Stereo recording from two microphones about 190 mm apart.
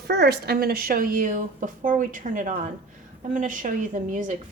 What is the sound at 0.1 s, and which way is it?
A woman's voice, 60° right (ahead or behind).